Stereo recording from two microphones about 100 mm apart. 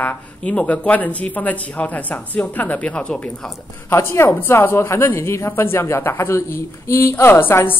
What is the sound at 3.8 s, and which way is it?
A woman's voice, 25° left (ahead or behind).